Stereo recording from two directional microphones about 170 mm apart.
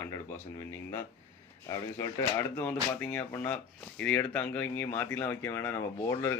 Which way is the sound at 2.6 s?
10° left (ahead or behind).